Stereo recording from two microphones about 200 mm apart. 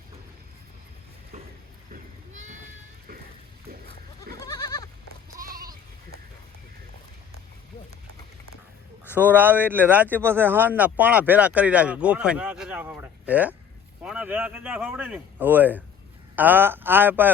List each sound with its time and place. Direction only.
1.9 s a sound: 40° right (ahead or behind)
3.7 s goat: 50° right (ahead or behind)
4.4 s goat: 20° left (ahead or behind)
5.4 s sheep: 45° right (ahead or behind)
9.1 s a man's voice: 10° right (ahead or behind)